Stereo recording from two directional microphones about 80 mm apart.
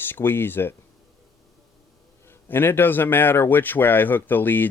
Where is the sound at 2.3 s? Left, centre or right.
Left.